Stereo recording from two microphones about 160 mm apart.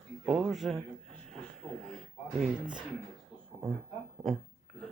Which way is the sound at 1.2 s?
5° left (ahead or behind).